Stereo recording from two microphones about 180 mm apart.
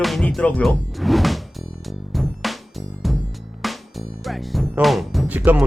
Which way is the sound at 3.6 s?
Centre (ahead or behind).